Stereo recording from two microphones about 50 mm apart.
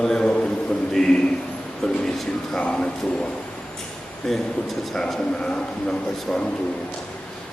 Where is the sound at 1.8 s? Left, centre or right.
Centre.